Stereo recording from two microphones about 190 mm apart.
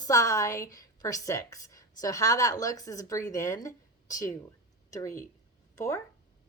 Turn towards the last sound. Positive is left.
turn(degrees=15)  # may be behind; listen again after turning